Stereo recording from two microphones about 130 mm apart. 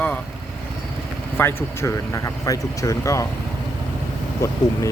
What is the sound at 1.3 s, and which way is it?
Speech, 20° left (ahead or behind).